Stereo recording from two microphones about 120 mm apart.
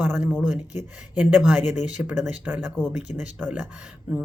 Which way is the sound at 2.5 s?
15° right (ahead or behind).